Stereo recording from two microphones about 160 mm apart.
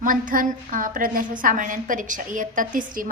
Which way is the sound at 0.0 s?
55° right (ahead or behind).